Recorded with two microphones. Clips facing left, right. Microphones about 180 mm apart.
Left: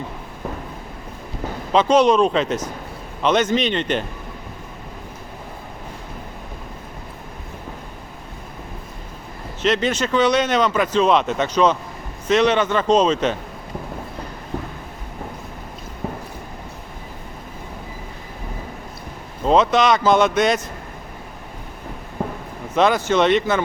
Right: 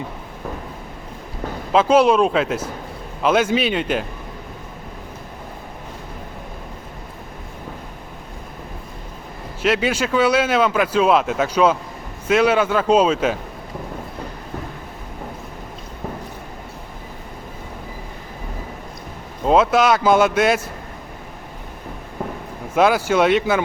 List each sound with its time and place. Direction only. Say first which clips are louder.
1.7 s speech: right 1 dB; 5° right (ahead or behind)
9.6 s speech: even; 10° right (ahead or behind)
19.5 s speech: right 1 dB; 5° right (ahead or behind)
22.7 s speech: right 1 dB; 10° right (ahead or behind)